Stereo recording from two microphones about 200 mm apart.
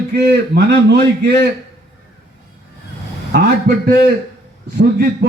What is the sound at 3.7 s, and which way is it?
A man's voice, 55° right (ahead or behind).